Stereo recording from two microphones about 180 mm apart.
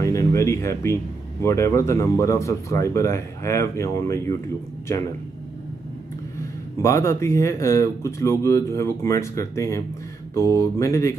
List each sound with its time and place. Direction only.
0.0 s music: 15° left (ahead or behind)
1.4 s speech: 15° left (ahead or behind)
6.8 s speech: 15° left (ahead or behind)